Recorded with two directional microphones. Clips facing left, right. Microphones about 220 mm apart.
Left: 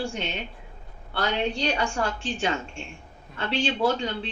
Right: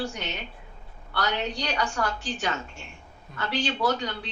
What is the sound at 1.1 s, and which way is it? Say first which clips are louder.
Speech: left 3 dB; 25° left (ahead or behind).